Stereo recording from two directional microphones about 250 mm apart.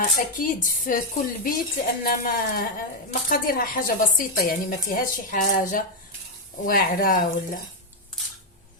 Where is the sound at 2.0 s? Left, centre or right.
Left.